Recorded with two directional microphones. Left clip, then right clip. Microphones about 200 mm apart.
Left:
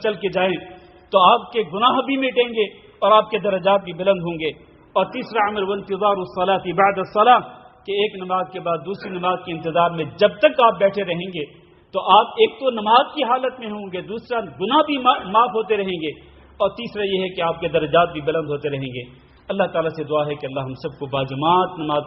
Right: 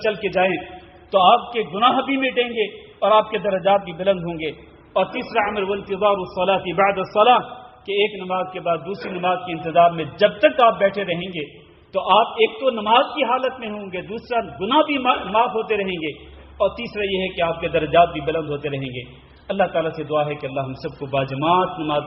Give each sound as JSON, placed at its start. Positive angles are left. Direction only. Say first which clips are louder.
{"t": 0.0, "sound": "a man's voice", "louder": "right 1 dB", "side_deg": 25}